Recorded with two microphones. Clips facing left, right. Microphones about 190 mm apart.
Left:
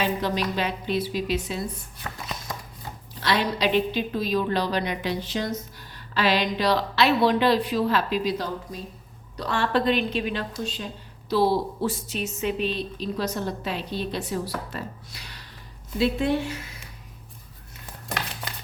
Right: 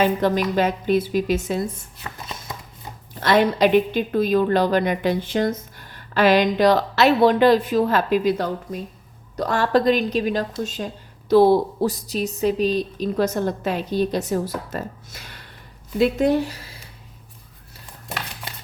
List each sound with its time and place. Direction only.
0.0 s a woman's voice: 50° right (ahead or behind)
3.2 s a woman's voice: 50° right (ahead or behind)
9.3 s a woman's voice: 45° right (ahead or behind)
11.9 s a woman's voice: 35° right (ahead or behind)